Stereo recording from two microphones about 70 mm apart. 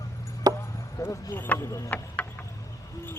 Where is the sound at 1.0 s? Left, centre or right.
Left.